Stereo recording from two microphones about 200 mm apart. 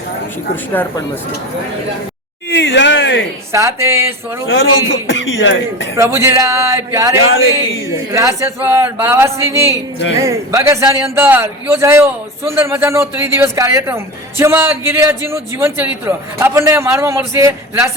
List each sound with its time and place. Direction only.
0.5 s a man's voice: 10° left (ahead or behind)
2.5 s speech: 65° left (ahead or behind)
3.5 s a man's voice: 15° right (ahead or behind)
4.4 s a man's voice: 75° left (ahead or behind)
6.0 s a man's voice: 15° right (ahead or behind)